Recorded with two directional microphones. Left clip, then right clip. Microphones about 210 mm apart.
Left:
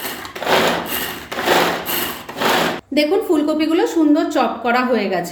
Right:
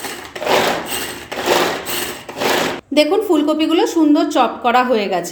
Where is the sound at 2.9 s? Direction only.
20° right (ahead or behind).